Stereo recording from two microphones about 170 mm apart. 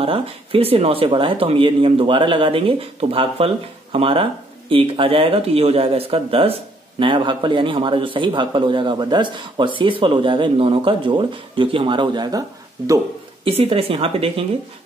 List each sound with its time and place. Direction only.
0.0 s speech: 35° right (ahead or behind)
13.4 s speech: 35° right (ahead or behind)